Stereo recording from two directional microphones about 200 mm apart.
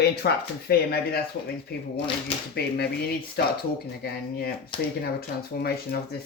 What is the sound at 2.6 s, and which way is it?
Speech, 55° left (ahead or behind).